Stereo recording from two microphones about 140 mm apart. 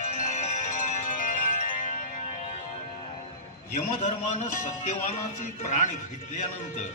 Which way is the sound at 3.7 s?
60° left (ahead or behind).